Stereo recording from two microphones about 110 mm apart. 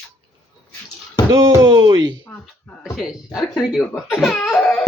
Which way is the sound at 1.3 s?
30° right (ahead or behind).